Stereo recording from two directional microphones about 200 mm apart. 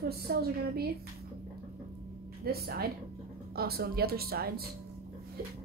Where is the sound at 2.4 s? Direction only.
50° right (ahead or behind).